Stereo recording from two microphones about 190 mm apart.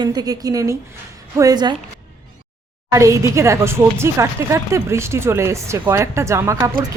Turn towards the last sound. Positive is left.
turn(degrees=-15)  # may be behind; listen again after turning